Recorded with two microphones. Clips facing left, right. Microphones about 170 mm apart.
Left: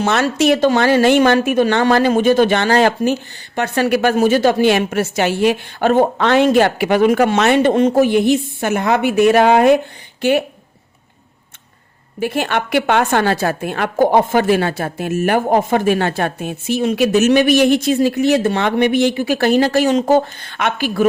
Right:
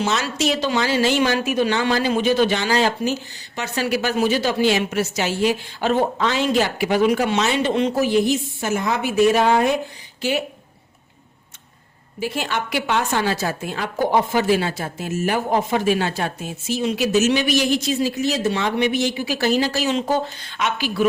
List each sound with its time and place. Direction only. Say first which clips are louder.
0.0 s a woman's voice: left 6 dB; 60° left (ahead or behind)
12.2 s a woman's voice: left 6 dB; 60° left (ahead or behind)